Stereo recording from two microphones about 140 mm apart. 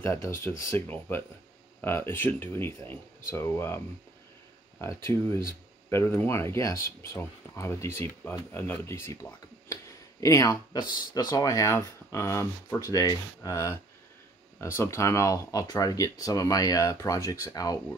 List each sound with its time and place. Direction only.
0.0 s speech: 20° left (ahead or behind)